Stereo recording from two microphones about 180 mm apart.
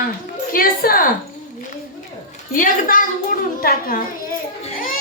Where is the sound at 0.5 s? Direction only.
55° left (ahead or behind).